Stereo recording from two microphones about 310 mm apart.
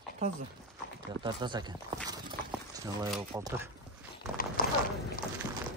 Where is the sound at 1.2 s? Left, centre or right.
Centre.